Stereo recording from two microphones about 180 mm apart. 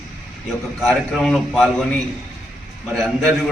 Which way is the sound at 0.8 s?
Centre (ahead or behind).